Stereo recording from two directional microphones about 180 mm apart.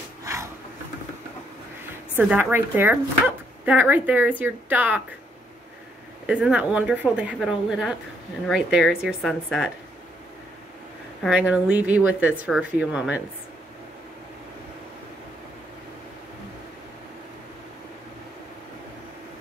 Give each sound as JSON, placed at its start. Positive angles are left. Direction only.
{"t": 0.2, "sound": "a sound", "side_deg": -15}
{"t": 2.1, "sound": "speech", "side_deg": -10}
{"t": 6.2, "sound": "speech", "side_deg": -5}
{"t": 11.2, "sound": "speech", "side_deg": -5}